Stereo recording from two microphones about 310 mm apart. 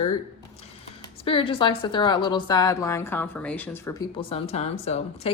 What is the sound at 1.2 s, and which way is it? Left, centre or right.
A woman's voice, centre.